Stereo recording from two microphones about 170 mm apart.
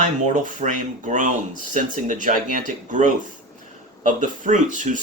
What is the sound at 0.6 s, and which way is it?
Speech, 50° right (ahead or behind).